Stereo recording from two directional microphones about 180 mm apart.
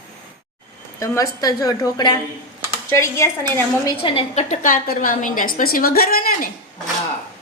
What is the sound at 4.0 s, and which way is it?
A woman's voice, 30° left (ahead or behind).